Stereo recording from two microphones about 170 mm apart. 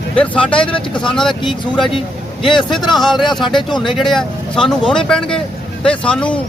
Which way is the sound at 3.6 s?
25° left (ahead or behind).